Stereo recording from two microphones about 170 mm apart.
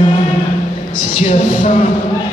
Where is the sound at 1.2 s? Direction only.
45° left (ahead or behind).